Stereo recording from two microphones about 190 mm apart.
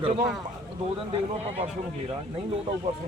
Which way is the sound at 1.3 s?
35° right (ahead or behind).